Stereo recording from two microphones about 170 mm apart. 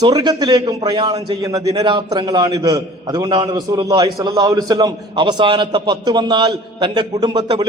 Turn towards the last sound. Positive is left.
turn(degrees=-25)  # may be behind; listen again after turning